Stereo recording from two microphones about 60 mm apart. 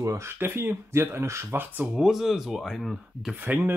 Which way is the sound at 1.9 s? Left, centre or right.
Centre.